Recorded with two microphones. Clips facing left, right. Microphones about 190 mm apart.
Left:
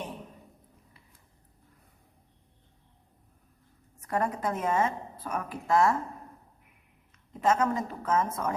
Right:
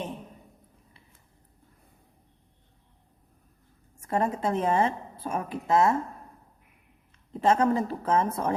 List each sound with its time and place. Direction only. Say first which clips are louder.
4.0 s a woman's voice: right 3 dB; 25° right (ahead or behind)
7.3 s a woman's voice: right 3 dB; 30° right (ahead or behind)